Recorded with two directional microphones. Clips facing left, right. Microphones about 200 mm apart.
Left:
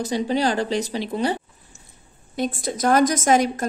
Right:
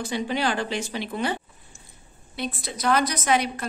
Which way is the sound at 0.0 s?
40° left (ahead or behind).